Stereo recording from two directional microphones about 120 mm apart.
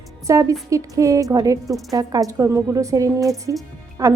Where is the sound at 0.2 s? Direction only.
25° right (ahead or behind).